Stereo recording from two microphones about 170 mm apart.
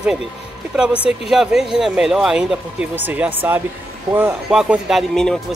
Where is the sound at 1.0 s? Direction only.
5° right (ahead or behind).